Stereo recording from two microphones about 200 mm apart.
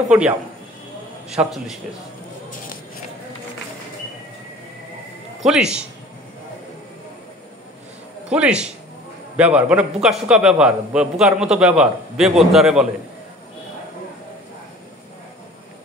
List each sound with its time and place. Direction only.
1.3 s a man's voice: centre (ahead or behind)
2.5 s a sound: 45° left (ahead or behind)
5.4 s a man's voice: 5° right (ahead or behind)
8.3 s a man's voice: 5° right (ahead or behind)